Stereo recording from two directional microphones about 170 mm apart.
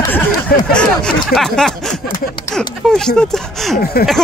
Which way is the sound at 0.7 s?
5° left (ahead or behind).